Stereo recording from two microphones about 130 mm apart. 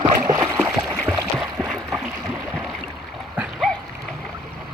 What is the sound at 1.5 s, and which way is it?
Splash, 5° left (ahead or behind).